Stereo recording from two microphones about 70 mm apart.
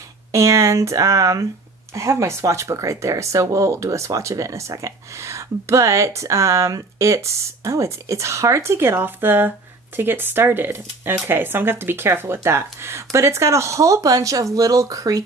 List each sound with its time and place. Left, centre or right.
0.3 s speech: right